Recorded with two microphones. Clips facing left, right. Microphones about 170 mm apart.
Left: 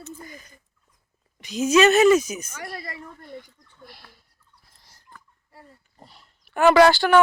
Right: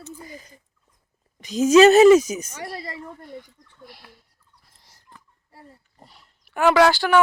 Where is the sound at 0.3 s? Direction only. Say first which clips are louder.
Right 3 dB; 30° right (ahead or behind).